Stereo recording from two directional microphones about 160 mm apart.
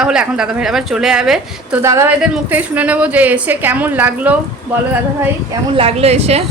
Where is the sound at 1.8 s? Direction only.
20° right (ahead or behind).